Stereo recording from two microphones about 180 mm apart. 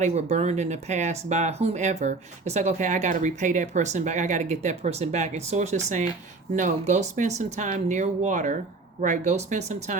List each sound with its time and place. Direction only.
0.0 s speech: 40° right (ahead or behind)